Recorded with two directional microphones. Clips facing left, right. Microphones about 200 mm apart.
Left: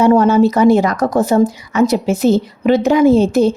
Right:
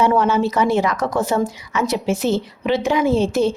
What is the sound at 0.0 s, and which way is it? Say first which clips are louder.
A woman's voice: left 7 dB; 40° left (ahead or behind).